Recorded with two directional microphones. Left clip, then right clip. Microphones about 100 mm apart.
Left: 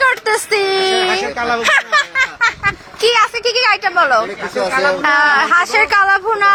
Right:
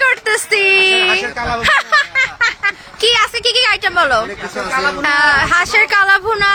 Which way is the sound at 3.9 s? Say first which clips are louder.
Left 1 dB; 60° right (ahead or behind).